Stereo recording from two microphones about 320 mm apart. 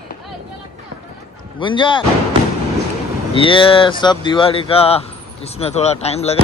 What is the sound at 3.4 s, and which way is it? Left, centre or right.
Speech, centre.